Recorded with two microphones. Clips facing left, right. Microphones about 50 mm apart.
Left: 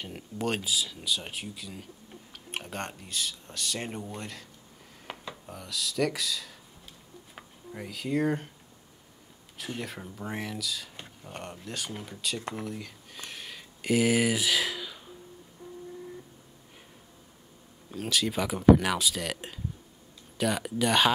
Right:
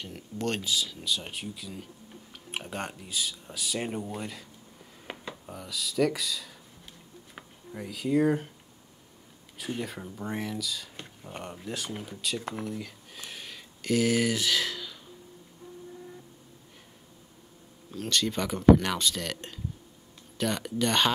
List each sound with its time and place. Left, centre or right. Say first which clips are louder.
0.0 s speech: even; centre
7.7 s speech: right 3 dB; centre
9.6 s speech: right 2 dB; centre
13.8 s speech: left 1 dB; centre
17.9 s speech: even; centre